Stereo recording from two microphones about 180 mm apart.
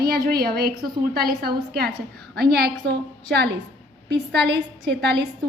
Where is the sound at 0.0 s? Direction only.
60° right (ahead or behind).